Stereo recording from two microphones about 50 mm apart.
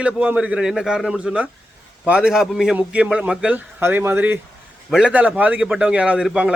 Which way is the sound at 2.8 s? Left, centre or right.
Right.